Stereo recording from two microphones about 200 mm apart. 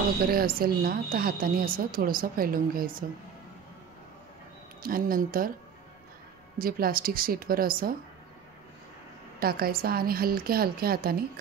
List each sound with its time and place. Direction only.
0.3 s a woman's voice: 45° right (ahead or behind)
4.8 s a woman's voice: 45° right (ahead or behind)
6.6 s a woman's voice: 45° right (ahead or behind)
9.4 s a woman's voice: 50° right (ahead or behind)